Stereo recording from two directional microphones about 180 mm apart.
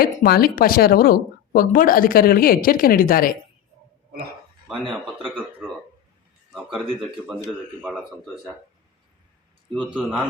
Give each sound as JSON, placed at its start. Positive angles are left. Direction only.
{"t": 0.0, "sound": "speech", "side_deg": 55}
{"t": 6.5, "sound": "speech", "side_deg": 0}
{"t": 9.9, "sound": "speech", "side_deg": 0}